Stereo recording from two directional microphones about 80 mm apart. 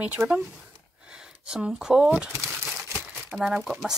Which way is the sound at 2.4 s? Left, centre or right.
Centre.